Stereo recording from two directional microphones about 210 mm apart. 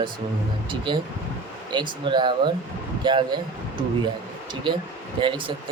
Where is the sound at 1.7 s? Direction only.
20° right (ahead or behind).